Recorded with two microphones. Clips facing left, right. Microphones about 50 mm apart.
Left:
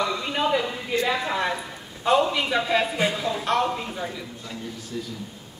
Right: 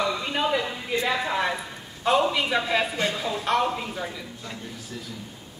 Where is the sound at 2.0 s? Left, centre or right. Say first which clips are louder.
Left 1 dB; centre.